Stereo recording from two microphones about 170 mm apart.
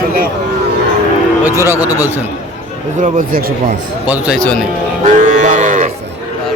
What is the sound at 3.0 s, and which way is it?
Speech, 55° right (ahead or behind).